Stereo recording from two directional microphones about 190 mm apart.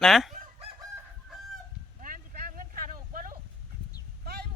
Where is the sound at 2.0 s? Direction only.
45° right (ahead or behind).